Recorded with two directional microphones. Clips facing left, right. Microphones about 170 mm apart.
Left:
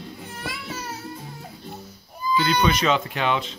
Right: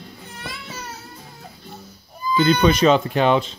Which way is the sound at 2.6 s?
40° right (ahead or behind).